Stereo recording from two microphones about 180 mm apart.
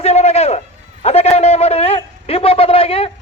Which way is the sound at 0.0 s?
35° left (ahead or behind).